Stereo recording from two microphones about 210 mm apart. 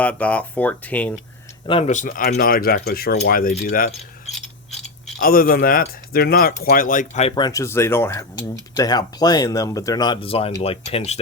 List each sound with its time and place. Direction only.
0.0 s speech: 5° left (ahead or behind)
1.6 s speech: 30° left (ahead or behind)
5.2 s speech: 45° left (ahead or behind)